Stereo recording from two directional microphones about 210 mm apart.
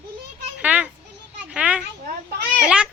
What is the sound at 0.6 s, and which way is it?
Children playing, 5° right (ahead or behind).